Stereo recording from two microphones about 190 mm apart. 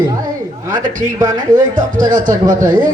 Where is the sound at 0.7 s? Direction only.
45° right (ahead or behind).